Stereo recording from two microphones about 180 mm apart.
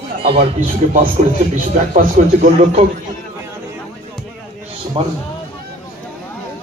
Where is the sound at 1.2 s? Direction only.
45° right (ahead or behind).